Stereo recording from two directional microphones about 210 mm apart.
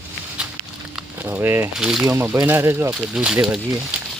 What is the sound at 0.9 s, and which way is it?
Speech, 10° right (ahead or behind).